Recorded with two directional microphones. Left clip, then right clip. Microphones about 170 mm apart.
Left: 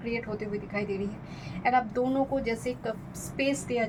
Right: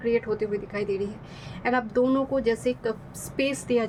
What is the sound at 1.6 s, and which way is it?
A woman's voice, 35° right (ahead or behind).